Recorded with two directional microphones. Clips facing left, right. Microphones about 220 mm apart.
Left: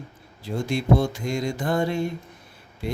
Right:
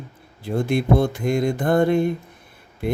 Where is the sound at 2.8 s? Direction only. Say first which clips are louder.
Right 6 dB; 55° right (ahead or behind).